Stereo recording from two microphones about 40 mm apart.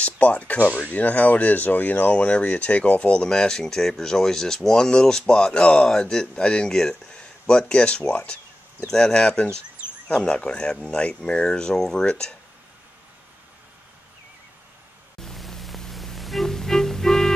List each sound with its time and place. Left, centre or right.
0.0 s speech: left
2.1 s speech: left
5.9 s speech: centre
8.8 s speech: centre
15.1 s pink noise: centre
15.9 s music: centre